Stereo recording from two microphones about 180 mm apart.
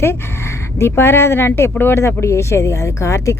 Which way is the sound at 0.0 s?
15° left (ahead or behind).